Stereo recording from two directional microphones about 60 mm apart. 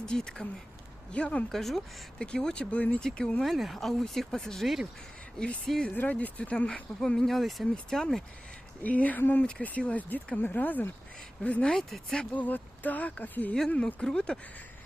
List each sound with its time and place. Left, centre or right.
0.0 s speech: centre
1.5 s speech: centre
2.1 s speech: centre
3.4 s speech: centre
5.9 s speech: left; by 8.0 s centre
8.8 s speech: left
11.7 s speech: centre
12.3 s speech: left
13.7 s speech: centre